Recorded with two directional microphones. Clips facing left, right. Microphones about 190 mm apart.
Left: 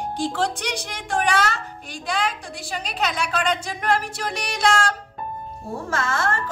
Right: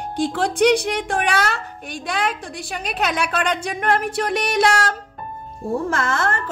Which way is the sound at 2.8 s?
60° right (ahead or behind).